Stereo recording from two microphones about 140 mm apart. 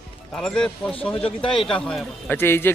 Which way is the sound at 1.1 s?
40° left (ahead or behind).